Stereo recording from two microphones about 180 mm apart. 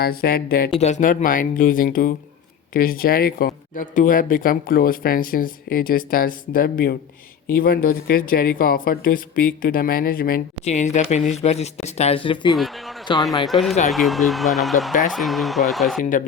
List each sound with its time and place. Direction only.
0.0 s speech: 55° left (ahead or behind)
0.8 s speech: 40° left (ahead or behind)
10.7 s speech: 40° left (ahead or behind); by 13.2 s 25° left (ahead or behind)
13.4 s speech: centre (ahead or behind)